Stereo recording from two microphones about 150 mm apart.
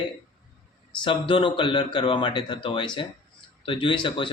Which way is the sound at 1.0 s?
35° left (ahead or behind).